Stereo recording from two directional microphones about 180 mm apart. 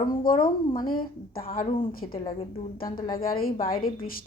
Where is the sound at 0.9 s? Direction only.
55° left (ahead or behind).